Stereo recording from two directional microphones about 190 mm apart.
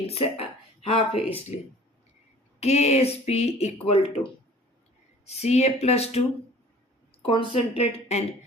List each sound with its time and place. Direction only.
0.1 s speech: 30° left (ahead or behind)
2.6 s speech: 35° left (ahead or behind)
7.3 s speech: 30° left (ahead or behind)